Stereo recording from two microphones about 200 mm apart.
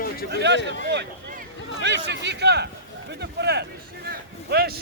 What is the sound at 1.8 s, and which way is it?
Speech, 60° right (ahead or behind).